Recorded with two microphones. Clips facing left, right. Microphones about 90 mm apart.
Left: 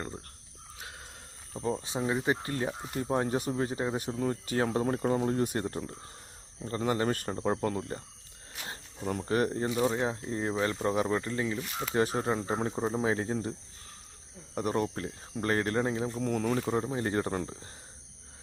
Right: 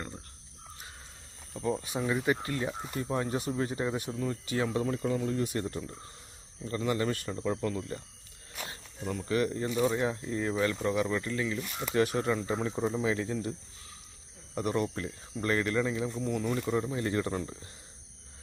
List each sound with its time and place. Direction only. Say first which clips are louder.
1.8 s speech: even; 25° left (ahead or behind); by 9.6 s 40° left (ahead or behind)
9.6 s speech: even; 30° left (ahead or behind)
14.5 s speech: even; 40° left (ahead or behind)
16.6 s speech: even; 35° left (ahead or behind)